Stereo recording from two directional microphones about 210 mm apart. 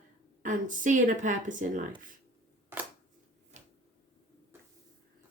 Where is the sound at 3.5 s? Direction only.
35° right (ahead or behind).